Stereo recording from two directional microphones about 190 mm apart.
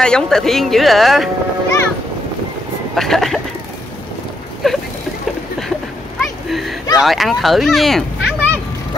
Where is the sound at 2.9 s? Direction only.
Centre (ahead or behind).